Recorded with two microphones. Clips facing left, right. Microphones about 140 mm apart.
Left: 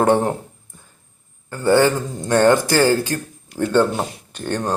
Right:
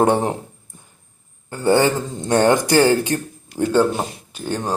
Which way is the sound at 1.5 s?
20° right (ahead or behind).